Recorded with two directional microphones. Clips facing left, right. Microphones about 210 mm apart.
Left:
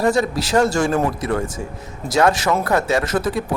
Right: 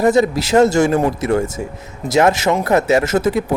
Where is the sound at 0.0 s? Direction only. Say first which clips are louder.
Right 4 dB; 20° right (ahead or behind).